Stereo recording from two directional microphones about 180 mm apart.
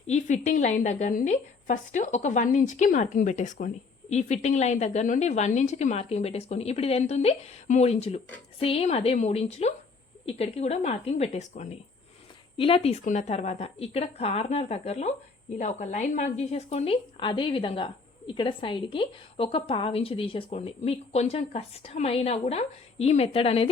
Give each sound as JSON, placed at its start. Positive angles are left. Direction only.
{"t": 0.1, "sound": "a woman's voice", "side_deg": 40}